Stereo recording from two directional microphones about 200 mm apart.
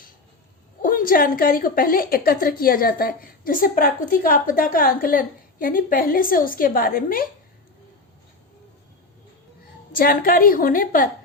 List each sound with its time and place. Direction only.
0.8 s a woman's voice: 45° left (ahead or behind)
9.9 s a woman's voice: 45° left (ahead or behind)